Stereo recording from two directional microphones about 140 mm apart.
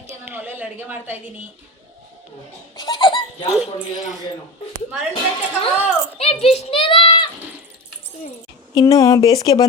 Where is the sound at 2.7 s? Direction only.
35° left (ahead or behind).